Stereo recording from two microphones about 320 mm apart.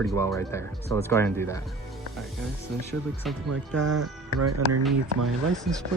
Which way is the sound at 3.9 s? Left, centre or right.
Right.